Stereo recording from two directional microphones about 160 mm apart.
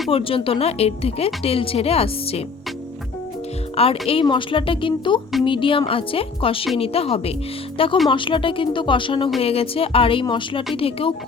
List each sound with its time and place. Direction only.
0.1 s speech: 35° left (ahead or behind)
4.0 s speech: 35° left (ahead or behind)